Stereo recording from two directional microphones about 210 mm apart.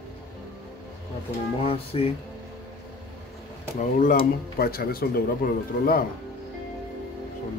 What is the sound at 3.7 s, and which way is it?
Speech, 35° left (ahead or behind).